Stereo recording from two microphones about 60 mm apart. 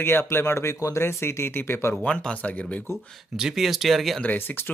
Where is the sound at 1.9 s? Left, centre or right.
Centre.